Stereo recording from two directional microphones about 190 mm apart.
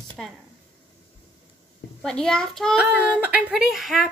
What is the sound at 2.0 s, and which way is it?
Speech, 5° left (ahead or behind).